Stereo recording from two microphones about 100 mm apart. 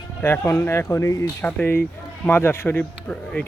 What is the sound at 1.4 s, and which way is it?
Speech, 15° left (ahead or behind).